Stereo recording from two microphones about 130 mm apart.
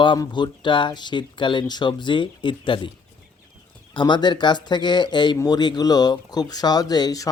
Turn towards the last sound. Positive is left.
turn(degrees=30)  # may be behind; listen again after turning